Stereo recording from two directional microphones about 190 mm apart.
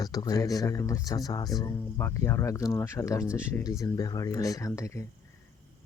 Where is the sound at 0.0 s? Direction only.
20° left (ahead or behind).